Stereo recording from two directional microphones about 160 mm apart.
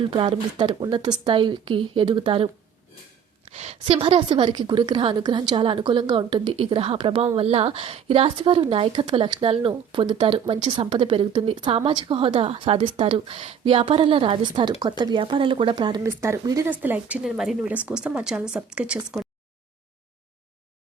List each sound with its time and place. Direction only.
0.1 s a woman's voice: 30° right (ahead or behind)
3.5 s a woman's voice: 40° right (ahead or behind)
16.0 s a woman's voice: 15° right (ahead or behind)
16.6 s speech: 10° right (ahead or behind)